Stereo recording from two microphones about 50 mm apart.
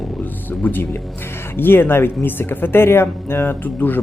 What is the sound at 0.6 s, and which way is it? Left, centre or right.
A man's voice, left.